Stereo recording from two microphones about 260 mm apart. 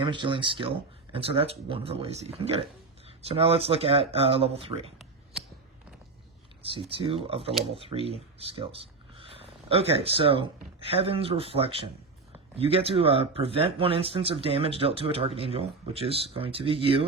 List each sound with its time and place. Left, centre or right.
0.0 s speech: centre
6.6 s speech: centre